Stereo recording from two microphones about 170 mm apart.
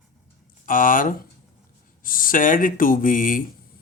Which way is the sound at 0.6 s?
50° left (ahead or behind).